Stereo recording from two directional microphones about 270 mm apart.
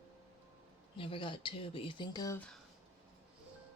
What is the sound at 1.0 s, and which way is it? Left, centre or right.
Speech, centre.